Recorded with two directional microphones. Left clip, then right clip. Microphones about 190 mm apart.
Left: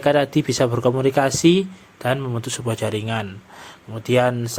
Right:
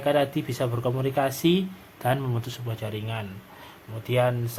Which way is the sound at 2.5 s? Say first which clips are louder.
Left 11 dB; 35° left (ahead or behind).